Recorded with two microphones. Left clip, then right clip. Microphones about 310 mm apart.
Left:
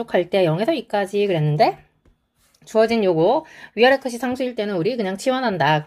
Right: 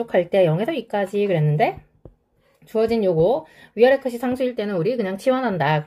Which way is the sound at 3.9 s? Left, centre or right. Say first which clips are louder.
Left 1 dB; centre.